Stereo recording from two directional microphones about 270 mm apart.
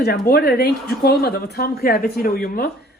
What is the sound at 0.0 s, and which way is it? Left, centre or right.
Speech, left.